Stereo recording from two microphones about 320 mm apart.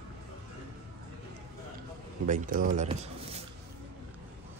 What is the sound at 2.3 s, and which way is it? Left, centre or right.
Speech, right.